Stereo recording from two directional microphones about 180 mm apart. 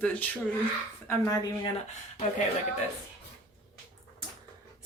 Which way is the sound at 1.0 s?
20° left (ahead or behind).